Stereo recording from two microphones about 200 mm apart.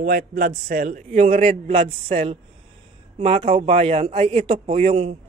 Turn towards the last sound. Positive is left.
turn(degrees=-30)  # may be behind; listen again after turning